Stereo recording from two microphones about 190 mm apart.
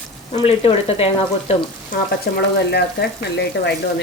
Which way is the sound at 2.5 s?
60° left (ahead or behind).